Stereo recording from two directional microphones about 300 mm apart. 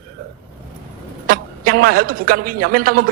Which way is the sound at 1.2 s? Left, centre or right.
Right.